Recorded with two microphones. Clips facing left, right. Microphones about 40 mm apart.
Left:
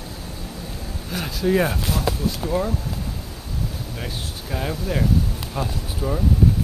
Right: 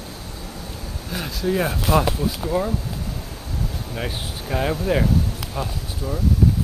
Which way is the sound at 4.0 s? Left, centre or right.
Centre.